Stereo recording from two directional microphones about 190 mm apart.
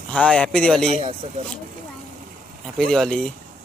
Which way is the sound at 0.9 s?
35° right (ahead or behind).